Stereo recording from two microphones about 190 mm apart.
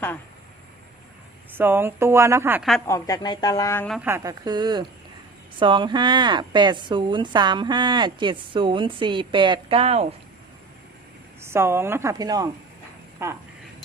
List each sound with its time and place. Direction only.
1.5 s a woman's voice: 10° right (ahead or behind)
2.8 s speech: 15° left (ahead or behind)
4.0 s speech: 15° right (ahead or behind); by 10.2 s 30° right (ahead or behind)
11.3 s a woman's voice: 15° right (ahead or behind)